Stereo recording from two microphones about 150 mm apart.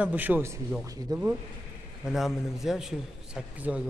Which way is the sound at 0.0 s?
10° right (ahead or behind).